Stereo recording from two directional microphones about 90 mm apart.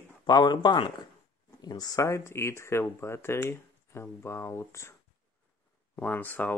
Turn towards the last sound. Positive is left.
turn(degrees=20)  # may be behind; listen again after turning